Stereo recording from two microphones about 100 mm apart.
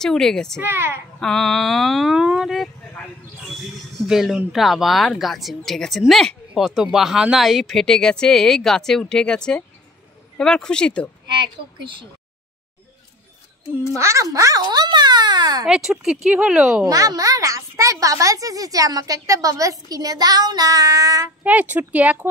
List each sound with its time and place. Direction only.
0.0 s speech: 5° left (ahead or behind)
0.6 s speech: 20° right (ahead or behind)
1.2 s speech: 5° left (ahead or behind)
4.0 s speech: centre (ahead or behind)
11.2 s a woman's voice: 50° right (ahead or behind)
13.9 s a child's voice: 30° right (ahead or behind)
15.6 s speech: 5° right (ahead or behind)
16.8 s a child's voice: 35° right (ahead or behind)
21.5 s speech: 15° right (ahead or behind)